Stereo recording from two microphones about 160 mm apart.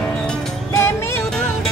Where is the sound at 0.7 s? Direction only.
15° left (ahead or behind).